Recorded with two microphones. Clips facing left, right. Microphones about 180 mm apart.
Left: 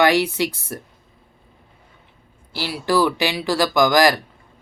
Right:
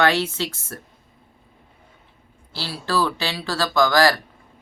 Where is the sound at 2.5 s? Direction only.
15° left (ahead or behind).